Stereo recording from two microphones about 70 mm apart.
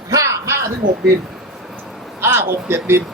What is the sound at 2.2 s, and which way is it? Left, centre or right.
Speech, right.